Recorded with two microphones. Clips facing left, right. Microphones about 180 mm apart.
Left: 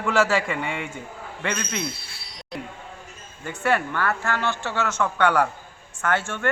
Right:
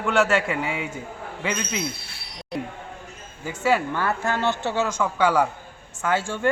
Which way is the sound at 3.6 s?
10° right (ahead or behind).